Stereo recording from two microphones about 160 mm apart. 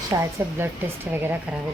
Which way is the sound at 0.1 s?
20° right (ahead or behind).